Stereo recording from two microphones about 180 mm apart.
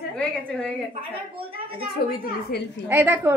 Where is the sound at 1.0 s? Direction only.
30° right (ahead or behind).